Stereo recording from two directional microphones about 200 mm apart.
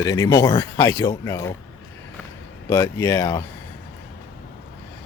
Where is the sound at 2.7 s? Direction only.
15° left (ahead or behind).